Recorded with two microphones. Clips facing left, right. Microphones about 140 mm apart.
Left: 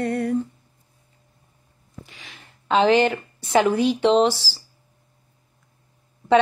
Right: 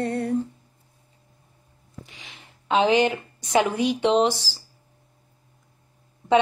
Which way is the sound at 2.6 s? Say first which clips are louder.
Left 2 dB; 10° right (ahead or behind).